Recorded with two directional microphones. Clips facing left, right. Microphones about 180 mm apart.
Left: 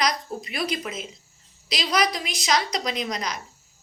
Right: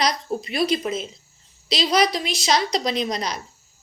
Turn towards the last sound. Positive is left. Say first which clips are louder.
# right 4 dB
turn(degrees=-30)  # may be behind; listen again after turning